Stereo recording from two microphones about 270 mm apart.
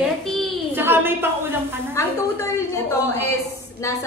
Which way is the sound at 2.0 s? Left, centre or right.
Centre.